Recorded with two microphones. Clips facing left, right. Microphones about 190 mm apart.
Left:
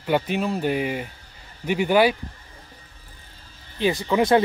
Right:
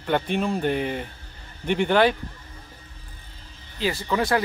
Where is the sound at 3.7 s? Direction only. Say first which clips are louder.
Left 4 dB; 15° left (ahead or behind).